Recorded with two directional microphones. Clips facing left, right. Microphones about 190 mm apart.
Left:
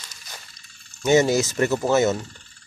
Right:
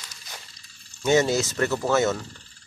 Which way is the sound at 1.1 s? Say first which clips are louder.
Left 3 dB; 15° left (ahead or behind).